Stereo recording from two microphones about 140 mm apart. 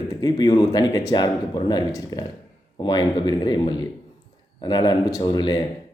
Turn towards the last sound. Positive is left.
turn(degrees=30)  # may be behind; listen again after turning